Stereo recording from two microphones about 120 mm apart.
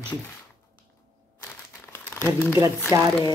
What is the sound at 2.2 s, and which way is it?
Speech, 15° left (ahead or behind).